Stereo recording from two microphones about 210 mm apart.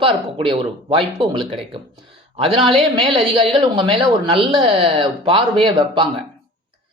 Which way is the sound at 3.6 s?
25° right (ahead or behind).